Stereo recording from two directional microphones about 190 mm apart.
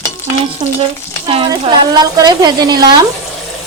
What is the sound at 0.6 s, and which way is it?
Stir, 35° right (ahead or behind).